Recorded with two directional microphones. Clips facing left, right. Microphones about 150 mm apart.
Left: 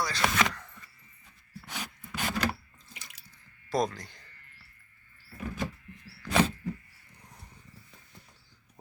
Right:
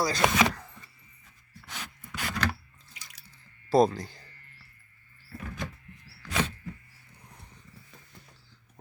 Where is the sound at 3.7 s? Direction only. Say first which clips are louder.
Right 7 dB; 30° right (ahead or behind).